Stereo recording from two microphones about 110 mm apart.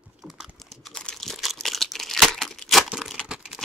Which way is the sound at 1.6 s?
Centre (ahead or behind).